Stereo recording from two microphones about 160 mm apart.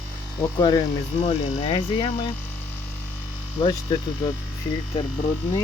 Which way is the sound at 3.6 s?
30° left (ahead or behind).